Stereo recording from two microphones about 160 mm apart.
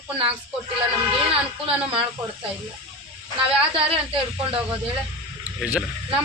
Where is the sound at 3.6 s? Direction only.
35° right (ahead or behind).